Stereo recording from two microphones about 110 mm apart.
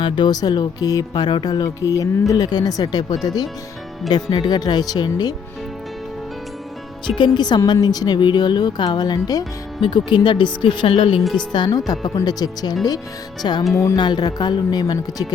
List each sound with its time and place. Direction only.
0.0 s speech: 40° left (ahead or behind)
1.1 s speech: 50° left (ahead or behind)
7.3 s speech: 40° left (ahead or behind)